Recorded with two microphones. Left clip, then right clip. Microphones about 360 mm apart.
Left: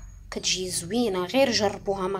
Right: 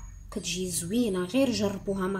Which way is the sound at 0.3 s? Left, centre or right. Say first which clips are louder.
Left 6 dB; centre.